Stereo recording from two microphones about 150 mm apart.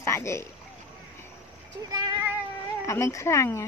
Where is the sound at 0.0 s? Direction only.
20° left (ahead or behind).